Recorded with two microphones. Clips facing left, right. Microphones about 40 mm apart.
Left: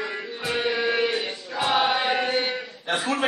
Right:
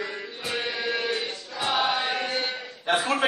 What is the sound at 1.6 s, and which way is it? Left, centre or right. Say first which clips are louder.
Chant: left 3 dB; centre.